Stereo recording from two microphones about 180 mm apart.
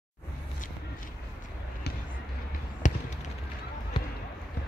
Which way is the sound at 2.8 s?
45° left (ahead or behind).